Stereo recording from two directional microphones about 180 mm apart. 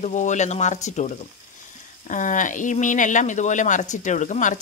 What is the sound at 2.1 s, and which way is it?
Speech, 45° left (ahead or behind).